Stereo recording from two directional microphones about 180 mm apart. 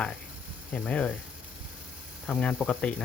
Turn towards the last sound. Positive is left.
turn(degrees=5)  # may be behind; listen again after turning